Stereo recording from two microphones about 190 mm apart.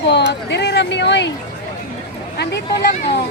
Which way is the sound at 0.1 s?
60° left (ahead or behind).